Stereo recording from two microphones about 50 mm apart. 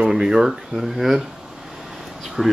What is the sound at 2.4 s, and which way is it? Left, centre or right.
Speech, centre.